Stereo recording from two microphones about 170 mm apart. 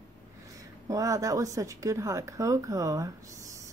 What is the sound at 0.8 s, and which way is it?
A woman's voice, 20° right (ahead or behind).